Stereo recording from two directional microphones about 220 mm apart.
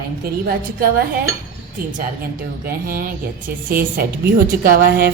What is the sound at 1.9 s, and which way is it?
Speech, 40° right (ahead or behind).